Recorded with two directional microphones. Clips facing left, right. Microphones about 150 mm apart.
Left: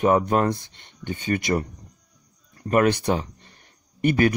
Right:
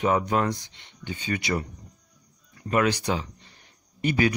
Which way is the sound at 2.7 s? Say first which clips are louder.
Left 4 dB; 50° left (ahead or behind).